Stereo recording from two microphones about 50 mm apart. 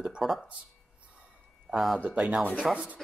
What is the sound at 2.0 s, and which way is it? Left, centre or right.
Speech, right.